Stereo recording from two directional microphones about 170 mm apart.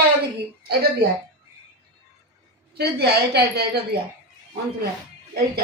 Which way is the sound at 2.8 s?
70° right (ahead or behind).